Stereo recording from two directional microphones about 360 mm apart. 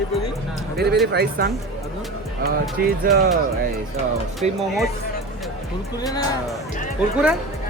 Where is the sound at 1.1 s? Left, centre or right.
Right.